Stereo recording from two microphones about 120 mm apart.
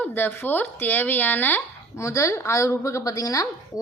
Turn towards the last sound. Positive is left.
turn(degrees=30)  # may be behind; listen again after turning